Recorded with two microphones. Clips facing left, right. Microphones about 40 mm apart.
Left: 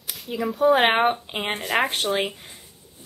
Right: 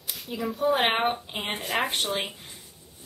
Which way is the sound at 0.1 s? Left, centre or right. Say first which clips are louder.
Left 4 dB; centre.